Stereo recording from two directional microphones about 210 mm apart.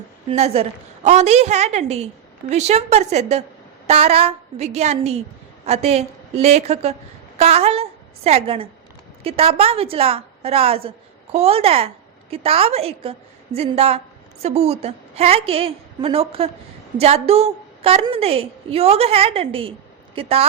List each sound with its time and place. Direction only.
0.3 s a woman's voice: 30° right (ahead or behind)